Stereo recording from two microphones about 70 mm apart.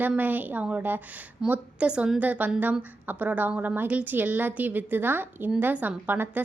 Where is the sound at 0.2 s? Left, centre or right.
Right.